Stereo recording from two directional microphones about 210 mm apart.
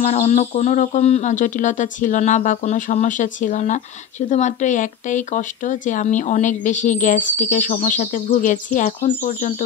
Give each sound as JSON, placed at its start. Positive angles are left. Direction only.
{"t": 0.0, "sound": "speech", "side_deg": 30}